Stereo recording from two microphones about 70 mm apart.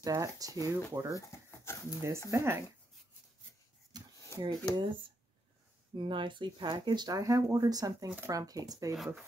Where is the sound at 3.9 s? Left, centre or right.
Right.